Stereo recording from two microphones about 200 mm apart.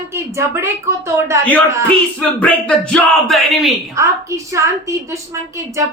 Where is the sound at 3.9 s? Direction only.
15° right (ahead or behind).